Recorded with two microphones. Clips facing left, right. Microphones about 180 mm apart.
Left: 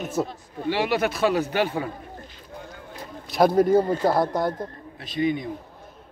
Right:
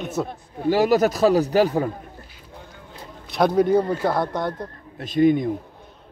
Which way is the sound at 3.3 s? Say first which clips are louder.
Even; centre (ahead or behind).